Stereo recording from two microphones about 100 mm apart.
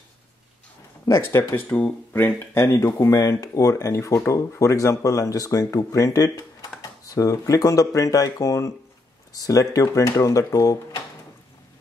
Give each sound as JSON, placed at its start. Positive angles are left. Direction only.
{"t": 1.0, "sound": "speech", "side_deg": 25}